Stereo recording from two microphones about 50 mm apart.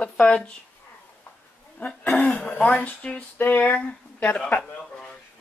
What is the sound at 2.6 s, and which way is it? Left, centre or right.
Speech, left.